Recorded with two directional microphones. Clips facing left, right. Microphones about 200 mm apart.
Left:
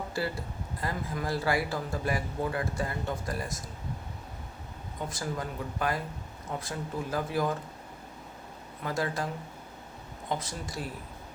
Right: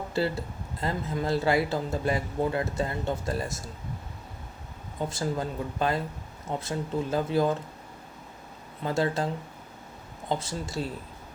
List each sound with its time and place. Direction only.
0.2 s speech: 25° right (ahead or behind)
5.0 s speech: 25° right (ahead or behind)
8.8 s speech: 25° right (ahead or behind)